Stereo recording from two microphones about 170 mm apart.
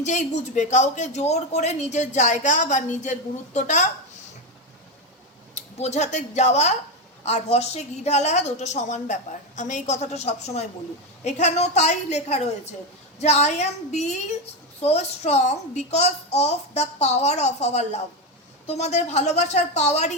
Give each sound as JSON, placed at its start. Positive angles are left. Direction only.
{"t": 0.0, "sound": "speech", "side_deg": 45}
{"t": 5.5, "sound": "a woman's voice", "side_deg": 40}